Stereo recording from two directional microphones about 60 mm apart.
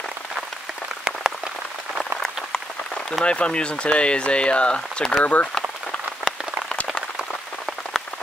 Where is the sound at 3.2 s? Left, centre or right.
Centre.